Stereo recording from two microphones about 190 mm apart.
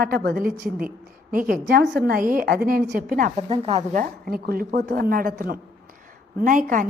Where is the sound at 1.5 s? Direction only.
50° right (ahead or behind).